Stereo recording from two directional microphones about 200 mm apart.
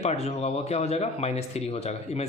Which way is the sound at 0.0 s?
30° left (ahead or behind).